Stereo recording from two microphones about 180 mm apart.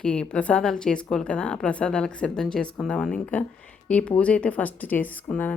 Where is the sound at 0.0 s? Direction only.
5° left (ahead or behind).